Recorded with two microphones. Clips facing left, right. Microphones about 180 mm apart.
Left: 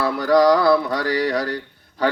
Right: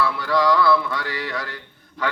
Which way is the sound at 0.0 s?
40° left (ahead or behind).